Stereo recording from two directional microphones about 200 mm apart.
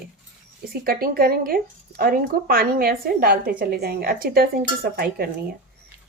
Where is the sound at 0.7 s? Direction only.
50° right (ahead or behind).